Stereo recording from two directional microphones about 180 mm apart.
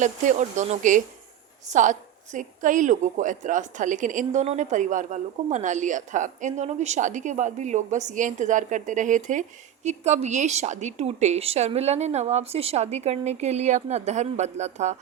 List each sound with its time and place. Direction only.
0.0 s a woman's voice: 40° right (ahead or behind)